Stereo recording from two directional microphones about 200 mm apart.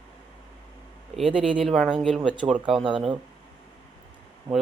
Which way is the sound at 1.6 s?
Centre (ahead or behind).